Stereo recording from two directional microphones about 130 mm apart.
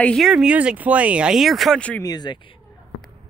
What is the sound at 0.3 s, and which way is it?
Speech, 5° right (ahead or behind).